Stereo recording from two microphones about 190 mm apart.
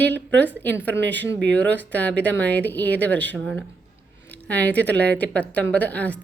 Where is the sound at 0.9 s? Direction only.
65° right (ahead or behind).